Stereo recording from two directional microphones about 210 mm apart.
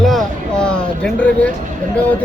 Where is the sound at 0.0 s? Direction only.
Centre (ahead or behind).